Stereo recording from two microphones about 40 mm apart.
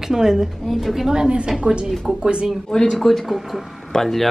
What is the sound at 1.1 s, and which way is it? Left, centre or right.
A woman's voice, right.